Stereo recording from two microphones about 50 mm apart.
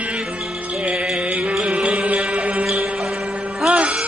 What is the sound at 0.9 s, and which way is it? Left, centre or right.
Music, centre.